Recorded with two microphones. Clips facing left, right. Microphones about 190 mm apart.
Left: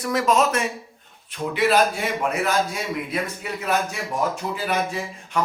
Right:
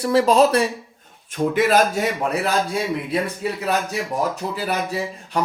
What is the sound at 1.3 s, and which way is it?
A man's voice, 45° right (ahead or behind).